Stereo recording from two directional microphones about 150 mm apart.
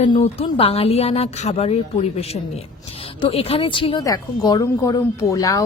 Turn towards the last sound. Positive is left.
turn(degrees=20)  # may be behind; listen again after turning